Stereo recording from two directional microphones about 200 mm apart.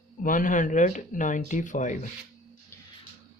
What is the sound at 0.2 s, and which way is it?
Speech, 40° left (ahead or behind).